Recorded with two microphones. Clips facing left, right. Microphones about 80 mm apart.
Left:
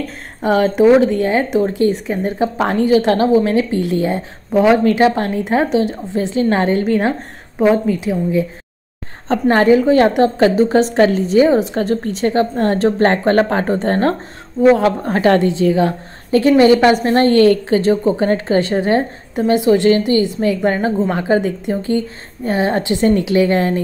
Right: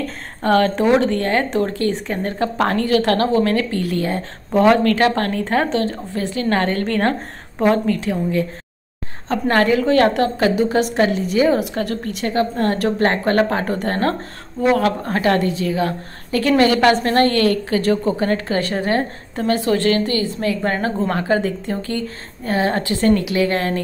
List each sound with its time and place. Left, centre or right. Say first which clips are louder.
0.4 s a woman's voice: left 3 dB; centre
9.3 s a woman's voice: left 5 dB; left
10.4 s a woman's voice: left 4 dB; left